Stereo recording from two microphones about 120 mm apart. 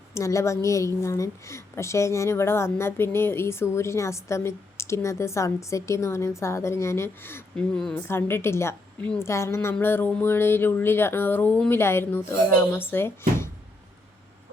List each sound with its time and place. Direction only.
0.1 s a woman's voice: 25° left (ahead or behind)